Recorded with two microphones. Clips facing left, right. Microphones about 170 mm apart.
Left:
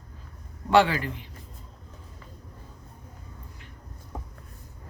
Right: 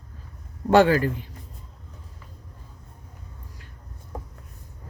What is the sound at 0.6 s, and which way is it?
Speech, 45° right (ahead or behind).